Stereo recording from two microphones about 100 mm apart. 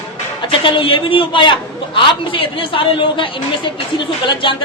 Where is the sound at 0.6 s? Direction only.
60° left (ahead or behind).